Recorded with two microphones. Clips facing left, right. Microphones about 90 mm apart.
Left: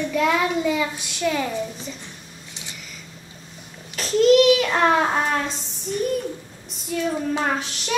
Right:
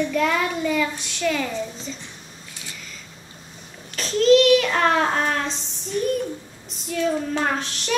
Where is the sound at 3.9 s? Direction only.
10° left (ahead or behind).